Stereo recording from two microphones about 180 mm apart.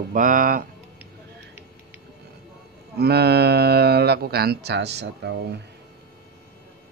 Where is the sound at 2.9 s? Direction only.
65° right (ahead or behind).